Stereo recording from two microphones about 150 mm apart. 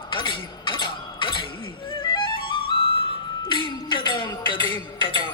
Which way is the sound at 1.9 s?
35° left (ahead or behind).